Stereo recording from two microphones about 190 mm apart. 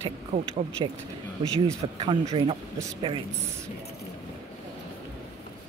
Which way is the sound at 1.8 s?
30° right (ahead or behind).